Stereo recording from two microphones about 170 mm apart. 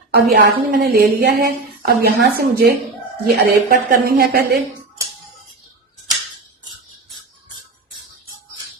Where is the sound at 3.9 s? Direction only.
65° right (ahead or behind).